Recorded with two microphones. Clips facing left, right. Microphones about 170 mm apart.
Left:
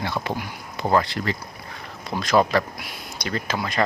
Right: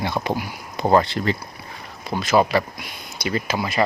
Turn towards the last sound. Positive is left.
turn(degrees=-10)  # may be behind; listen again after turning